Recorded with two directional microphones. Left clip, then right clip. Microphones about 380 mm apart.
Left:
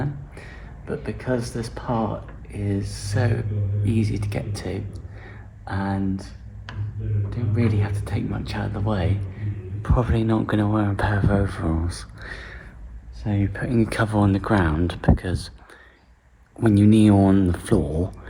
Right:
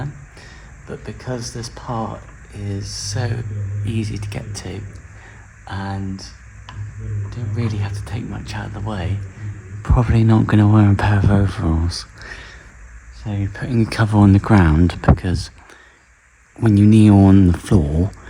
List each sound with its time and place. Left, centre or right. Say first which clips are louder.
0.9 s speech: left 3 dB; right
5.2 s a sound: right 1 dB; right
7.3 s speech: left 2 dB; right
16.6 s speech: right 3 dB; right